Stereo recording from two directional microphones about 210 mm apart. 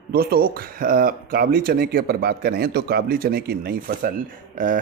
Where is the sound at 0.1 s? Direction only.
45° right (ahead or behind).